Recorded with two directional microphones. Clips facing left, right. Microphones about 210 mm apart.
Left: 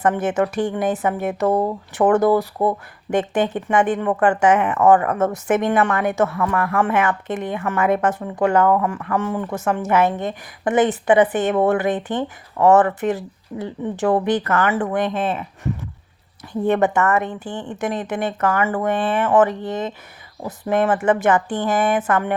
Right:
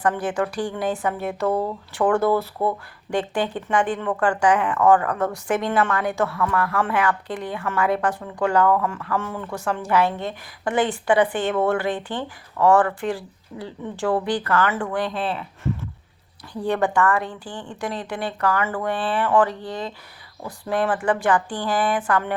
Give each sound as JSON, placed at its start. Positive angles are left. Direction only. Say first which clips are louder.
{"t": 0.0, "sound": "a woman's voice", "louder": "left 4 dB", "side_deg": 20}